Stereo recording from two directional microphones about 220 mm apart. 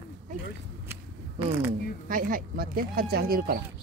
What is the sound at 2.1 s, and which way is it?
Speech, 40° right (ahead or behind).